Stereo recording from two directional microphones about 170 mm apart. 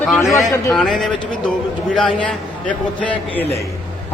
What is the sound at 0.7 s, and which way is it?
A man's voice, centre (ahead or behind).